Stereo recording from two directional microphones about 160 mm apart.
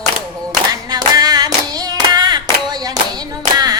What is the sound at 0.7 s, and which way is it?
Hands, 25° right (ahead or behind).